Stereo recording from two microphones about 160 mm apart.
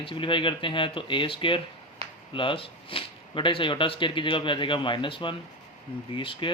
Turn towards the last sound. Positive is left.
turn(degrees=35)  # may be behind; listen again after turning